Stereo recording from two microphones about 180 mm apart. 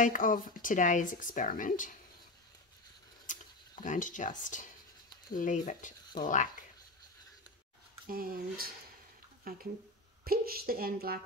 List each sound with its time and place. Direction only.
0.0 s speech: 50° left (ahead or behind)
3.3 s a sound: 45° left (ahead or behind)
5.3 s speech: 45° left (ahead or behind)
8.1 s a woman's voice: 55° right (ahead or behind)